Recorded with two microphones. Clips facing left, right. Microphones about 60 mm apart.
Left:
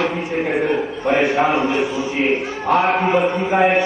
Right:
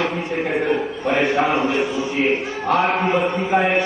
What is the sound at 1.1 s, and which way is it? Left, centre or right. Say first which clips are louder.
A man's voice: left 2 dB; centre.